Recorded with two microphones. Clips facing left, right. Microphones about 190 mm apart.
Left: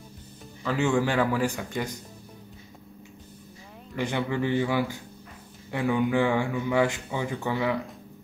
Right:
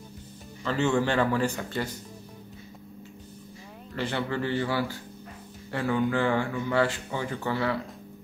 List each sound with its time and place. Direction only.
0.7 s speech: 10° left (ahead or behind)
3.9 s speech: 15° left (ahead or behind)